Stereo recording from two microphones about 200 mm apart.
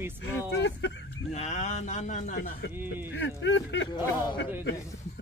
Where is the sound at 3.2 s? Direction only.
65° left (ahead or behind).